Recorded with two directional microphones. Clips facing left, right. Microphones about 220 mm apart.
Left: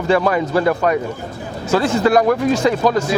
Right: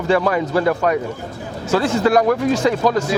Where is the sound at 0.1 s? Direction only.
20° left (ahead or behind).